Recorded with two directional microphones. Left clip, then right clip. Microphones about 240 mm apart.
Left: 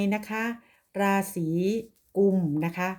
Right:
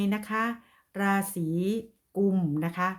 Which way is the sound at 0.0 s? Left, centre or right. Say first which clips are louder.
Even; centre.